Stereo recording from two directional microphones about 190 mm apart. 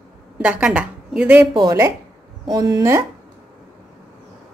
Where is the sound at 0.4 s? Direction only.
5° right (ahead or behind).